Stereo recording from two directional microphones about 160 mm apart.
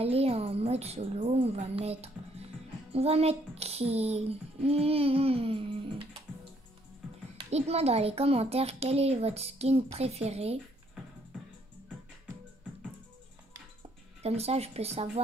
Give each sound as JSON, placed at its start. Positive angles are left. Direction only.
{"t": 0.0, "sound": "female singing", "side_deg": -35}
{"t": 7.5, "sound": "female singing", "side_deg": -40}
{"t": 14.2, "sound": "female singing", "side_deg": -40}